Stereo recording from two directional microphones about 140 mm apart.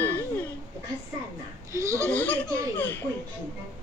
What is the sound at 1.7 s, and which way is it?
Laughter, 20° right (ahead or behind).